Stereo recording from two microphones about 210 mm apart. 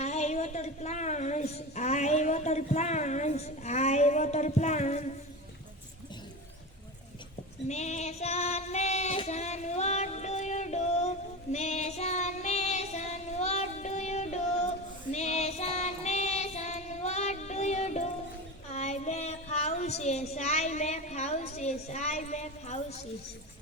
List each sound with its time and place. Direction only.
0.0 s a sound: 30° left (ahead or behind)
7.7 s female singing: 30° left (ahead or behind)
11.5 s child singing: 30° left (ahead or behind)